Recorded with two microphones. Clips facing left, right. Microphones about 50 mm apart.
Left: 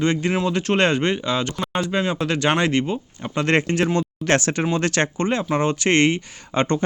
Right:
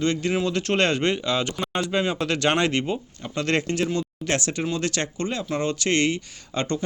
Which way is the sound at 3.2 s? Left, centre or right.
Left.